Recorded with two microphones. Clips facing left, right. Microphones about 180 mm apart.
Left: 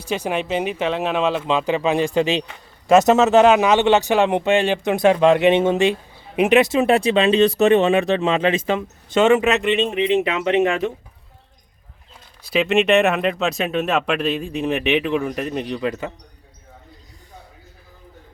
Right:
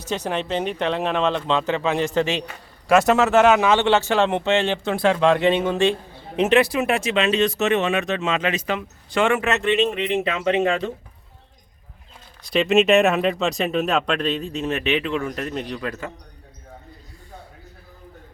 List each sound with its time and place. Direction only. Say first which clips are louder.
0.0 s speech: left 2 dB; 10° left (ahead or behind)
12.4 s speech: even; 5° left (ahead or behind); by 16.1 s 20° left (ahead or behind)